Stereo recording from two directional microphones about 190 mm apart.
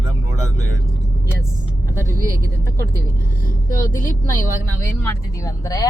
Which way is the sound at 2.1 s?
45° right (ahead or behind).